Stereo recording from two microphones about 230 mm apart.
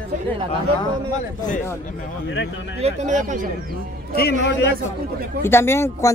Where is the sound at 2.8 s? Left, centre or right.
Right.